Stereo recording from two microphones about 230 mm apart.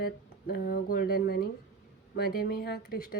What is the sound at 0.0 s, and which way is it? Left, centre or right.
A woman's voice, left.